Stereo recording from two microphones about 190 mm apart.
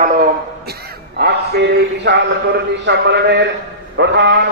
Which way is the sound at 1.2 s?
60° right (ahead or behind).